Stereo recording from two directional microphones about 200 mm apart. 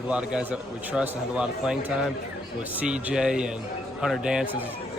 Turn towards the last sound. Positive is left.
turn(degrees=-5)  # may be behind; listen again after turning